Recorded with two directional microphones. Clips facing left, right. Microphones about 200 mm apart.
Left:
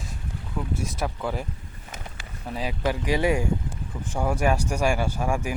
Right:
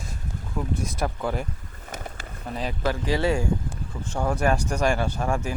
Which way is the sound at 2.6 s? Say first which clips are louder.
Even; 10° left (ahead or behind).